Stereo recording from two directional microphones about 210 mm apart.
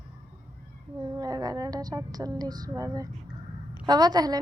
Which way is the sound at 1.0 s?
20° right (ahead or behind).